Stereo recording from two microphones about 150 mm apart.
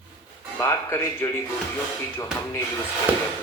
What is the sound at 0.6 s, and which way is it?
Speech, 20° left (ahead or behind).